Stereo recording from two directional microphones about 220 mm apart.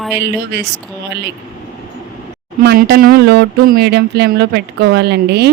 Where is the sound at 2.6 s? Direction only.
45° right (ahead or behind).